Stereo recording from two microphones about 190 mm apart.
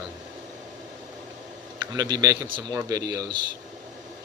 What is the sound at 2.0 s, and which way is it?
Speech, 20° right (ahead or behind).